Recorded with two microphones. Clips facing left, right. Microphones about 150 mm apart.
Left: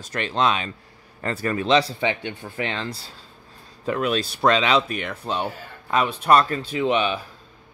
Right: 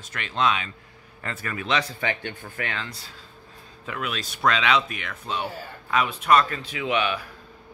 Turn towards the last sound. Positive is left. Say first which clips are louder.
# left 4 dB
turn(degrees=25)  # may be behind; listen again after turning